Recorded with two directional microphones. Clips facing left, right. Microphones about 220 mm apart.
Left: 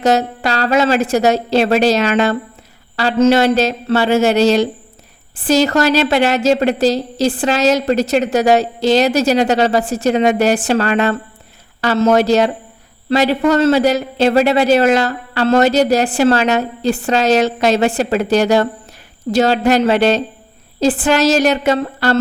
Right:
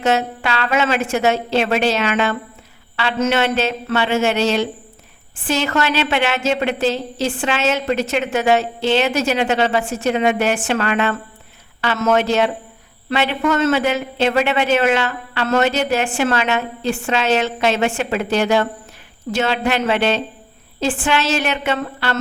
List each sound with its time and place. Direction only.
0.0 s a woman's voice: 40° left (ahead or behind)